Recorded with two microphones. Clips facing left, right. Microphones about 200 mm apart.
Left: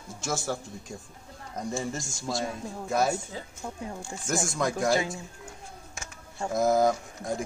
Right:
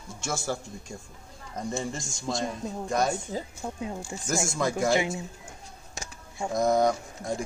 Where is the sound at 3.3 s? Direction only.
40° right (ahead or behind).